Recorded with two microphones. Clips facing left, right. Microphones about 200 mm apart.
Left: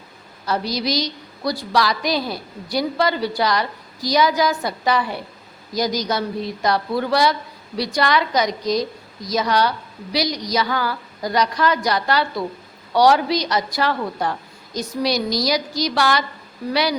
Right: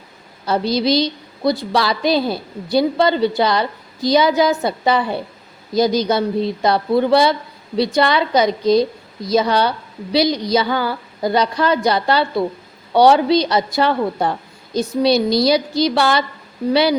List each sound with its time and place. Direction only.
0.4 s a woman's voice: 25° right (ahead or behind)